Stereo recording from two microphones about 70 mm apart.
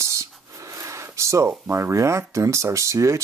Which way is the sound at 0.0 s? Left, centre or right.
Right.